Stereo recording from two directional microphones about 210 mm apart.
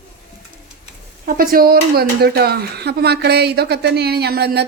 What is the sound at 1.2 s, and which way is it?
Speech, 45° right (ahead or behind).